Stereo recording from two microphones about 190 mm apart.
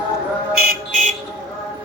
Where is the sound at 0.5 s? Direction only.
50° right (ahead or behind).